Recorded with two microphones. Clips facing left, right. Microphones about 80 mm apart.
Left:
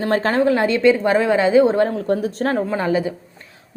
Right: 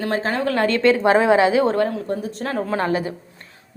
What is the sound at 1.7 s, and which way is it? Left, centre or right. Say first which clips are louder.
Speech: left 2 dB; left.